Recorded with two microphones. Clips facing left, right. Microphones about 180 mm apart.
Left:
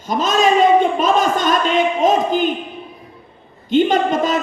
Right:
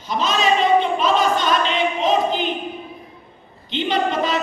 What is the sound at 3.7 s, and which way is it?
Speech, 45° left (ahead or behind).